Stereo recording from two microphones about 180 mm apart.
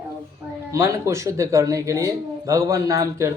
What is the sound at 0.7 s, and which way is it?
Speech, 15° right (ahead or behind).